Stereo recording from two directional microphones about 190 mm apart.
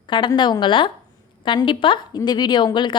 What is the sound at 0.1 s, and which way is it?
A woman's voice, 25° left (ahead or behind).